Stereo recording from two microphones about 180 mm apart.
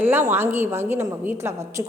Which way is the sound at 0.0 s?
10° right (ahead or behind).